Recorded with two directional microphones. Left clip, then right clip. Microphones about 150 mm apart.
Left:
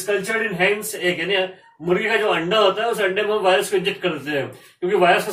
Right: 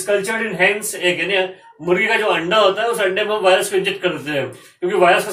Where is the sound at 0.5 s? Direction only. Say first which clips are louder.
Right 3 dB; 30° right (ahead or behind).